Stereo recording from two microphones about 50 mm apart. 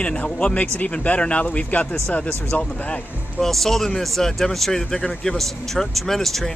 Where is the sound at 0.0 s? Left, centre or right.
Left.